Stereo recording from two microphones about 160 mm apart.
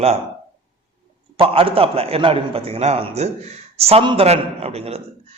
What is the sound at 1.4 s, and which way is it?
A man's voice, 35° right (ahead or behind).